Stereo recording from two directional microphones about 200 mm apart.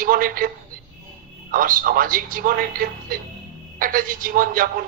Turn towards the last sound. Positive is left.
turn(degrees=-45)  # may be behind; listen again after turning